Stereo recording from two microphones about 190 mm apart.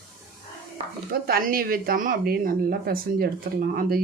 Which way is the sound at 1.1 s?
50° right (ahead or behind).